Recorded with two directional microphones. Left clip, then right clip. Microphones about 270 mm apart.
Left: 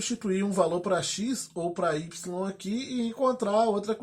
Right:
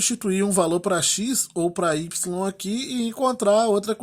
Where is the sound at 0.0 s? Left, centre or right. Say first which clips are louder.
Right 6 dB; right.